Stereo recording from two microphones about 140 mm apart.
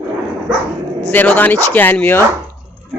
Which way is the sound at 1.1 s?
10° left (ahead or behind).